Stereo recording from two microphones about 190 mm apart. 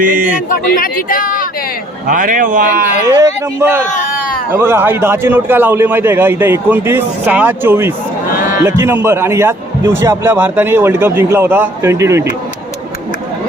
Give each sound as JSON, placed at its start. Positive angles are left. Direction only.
{"t": 0.0, "sound": "speech", "side_deg": -45}
{"t": 0.7, "sound": "speech", "side_deg": 50}
{"t": 2.0, "sound": "speech", "side_deg": -45}
{"t": 3.2, "sound": "a man's voice", "side_deg": -15}
{"t": 3.8, "sound": "a sound", "side_deg": 45}
{"t": 4.5, "sound": "a man's voice", "side_deg": -15}